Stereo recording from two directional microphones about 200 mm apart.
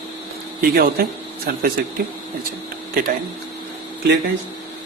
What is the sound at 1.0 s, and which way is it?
Speech, 45° right (ahead or behind).